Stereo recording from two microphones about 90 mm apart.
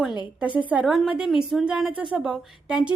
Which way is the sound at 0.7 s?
15° right (ahead or behind).